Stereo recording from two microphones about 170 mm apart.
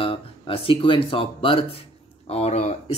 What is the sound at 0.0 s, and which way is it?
Speech, 30° left (ahead or behind).